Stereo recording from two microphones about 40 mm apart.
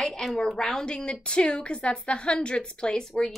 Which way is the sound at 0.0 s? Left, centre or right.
Centre.